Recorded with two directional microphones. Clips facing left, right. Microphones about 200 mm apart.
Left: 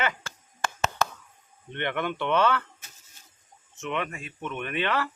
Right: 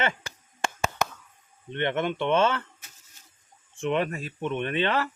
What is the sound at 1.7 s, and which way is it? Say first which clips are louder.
Speech: right 3 dB; 20° right (ahead or behind).